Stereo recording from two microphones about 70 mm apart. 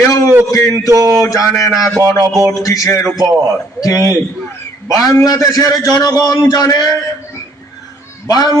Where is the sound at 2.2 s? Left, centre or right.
Right.